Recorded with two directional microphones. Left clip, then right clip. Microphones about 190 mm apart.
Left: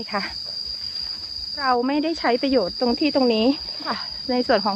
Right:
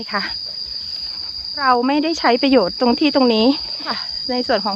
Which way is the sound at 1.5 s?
20° right (ahead or behind).